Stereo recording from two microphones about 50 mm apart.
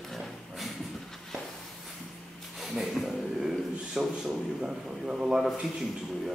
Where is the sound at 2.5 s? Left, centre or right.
Centre.